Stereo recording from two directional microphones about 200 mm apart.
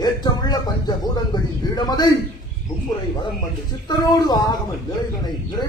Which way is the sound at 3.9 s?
20° left (ahead or behind).